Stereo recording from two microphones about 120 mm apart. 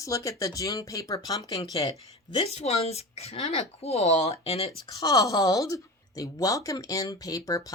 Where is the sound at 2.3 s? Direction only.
60° left (ahead or behind).